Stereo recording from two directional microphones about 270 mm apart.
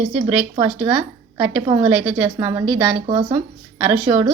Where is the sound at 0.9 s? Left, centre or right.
Centre.